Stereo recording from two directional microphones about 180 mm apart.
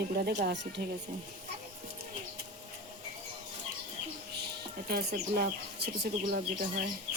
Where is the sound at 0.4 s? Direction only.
75° right (ahead or behind).